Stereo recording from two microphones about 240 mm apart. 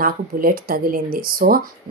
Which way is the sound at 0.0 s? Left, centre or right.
Right.